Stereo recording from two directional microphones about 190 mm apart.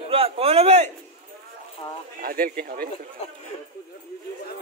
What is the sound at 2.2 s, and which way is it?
Speech, 50° right (ahead or behind).